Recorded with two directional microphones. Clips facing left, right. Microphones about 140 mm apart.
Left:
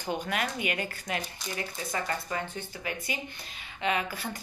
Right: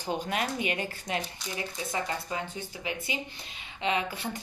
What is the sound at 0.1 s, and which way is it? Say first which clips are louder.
Speech: right 1 dB; 35° right (ahead or behind).